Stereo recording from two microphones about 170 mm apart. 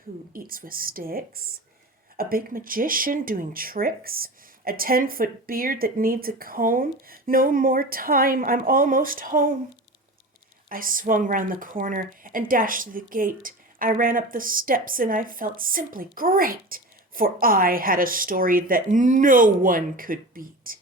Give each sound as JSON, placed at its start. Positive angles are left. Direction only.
{"t": 0.3, "sound": "speech", "side_deg": -55}
{"t": 10.7, "sound": "speech", "side_deg": -55}